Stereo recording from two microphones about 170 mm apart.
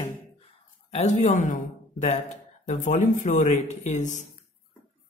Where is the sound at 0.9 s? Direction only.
45° left (ahead or behind).